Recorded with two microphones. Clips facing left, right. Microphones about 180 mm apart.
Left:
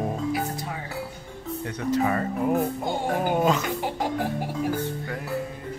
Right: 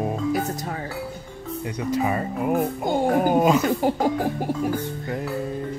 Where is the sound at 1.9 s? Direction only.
10° right (ahead or behind).